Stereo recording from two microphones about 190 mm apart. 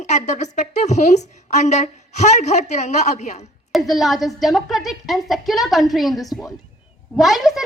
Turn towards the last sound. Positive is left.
turn(degrees=0)  # may be behind; listen again after turning